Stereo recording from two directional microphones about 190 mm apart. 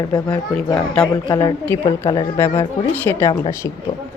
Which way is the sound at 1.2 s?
20° left (ahead or behind).